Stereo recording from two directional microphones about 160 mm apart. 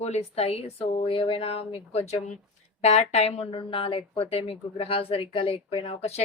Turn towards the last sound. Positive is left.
turn(degrees=40)  # may be behind; listen again after turning